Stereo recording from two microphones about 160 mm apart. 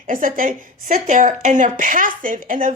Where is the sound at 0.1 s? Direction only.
60° right (ahead or behind).